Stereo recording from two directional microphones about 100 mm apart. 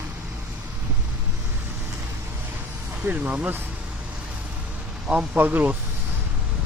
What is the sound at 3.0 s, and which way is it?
Speech, 15° right (ahead or behind).